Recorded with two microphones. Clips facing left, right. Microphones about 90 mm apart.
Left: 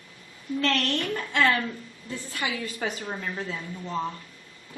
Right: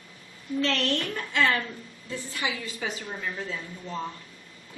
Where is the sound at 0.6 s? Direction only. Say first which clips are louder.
Left 1 dB; 50° left (ahead or behind).